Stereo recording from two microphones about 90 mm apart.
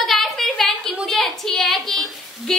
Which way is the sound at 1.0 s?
Centre (ahead or behind).